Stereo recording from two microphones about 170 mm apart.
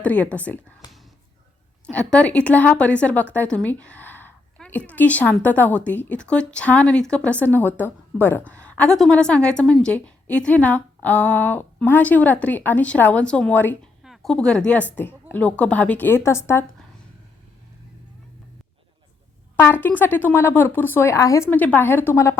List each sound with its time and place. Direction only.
0.0 s a woman's voice: 10° left (ahead or behind)
0.8 s speech: 25° left (ahead or behind)
1.9 s a woman's voice: 5° left (ahead or behind)
14.0 s a woman's voice: centre (ahead or behind); by 16.6 s 15° left (ahead or behind)
19.8 s a woman's voice: 10° left (ahead or behind)